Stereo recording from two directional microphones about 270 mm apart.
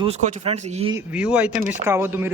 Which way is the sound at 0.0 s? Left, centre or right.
Right.